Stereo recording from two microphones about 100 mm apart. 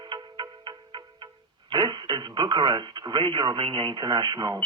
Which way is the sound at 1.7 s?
45° right (ahead or behind).